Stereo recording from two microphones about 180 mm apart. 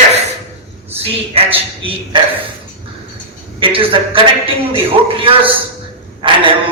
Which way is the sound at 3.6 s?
30° right (ahead or behind).